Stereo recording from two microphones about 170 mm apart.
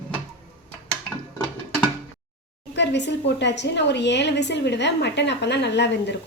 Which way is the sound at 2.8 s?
90° left.